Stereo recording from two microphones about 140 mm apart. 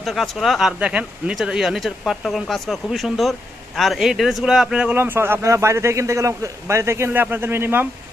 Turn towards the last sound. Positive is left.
turn(degrees=-15)  # may be behind; listen again after turning